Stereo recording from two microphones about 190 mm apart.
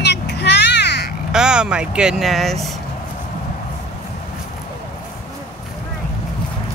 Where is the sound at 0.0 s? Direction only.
65° left (ahead or behind).